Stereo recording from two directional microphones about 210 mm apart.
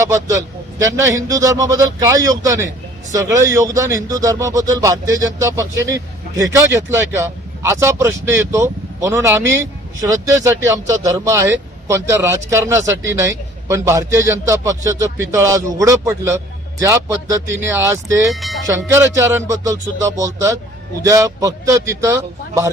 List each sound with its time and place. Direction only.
0.0 s a man's voice: 15° right (ahead or behind)
18.3 s speech: centre (ahead or behind)
18.7 s a man's voice: 15° right (ahead or behind)